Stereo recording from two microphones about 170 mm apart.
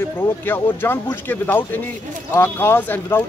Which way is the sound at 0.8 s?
15° left (ahead or behind).